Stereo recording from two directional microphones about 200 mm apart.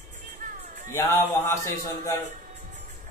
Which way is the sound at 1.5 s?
15° left (ahead or behind).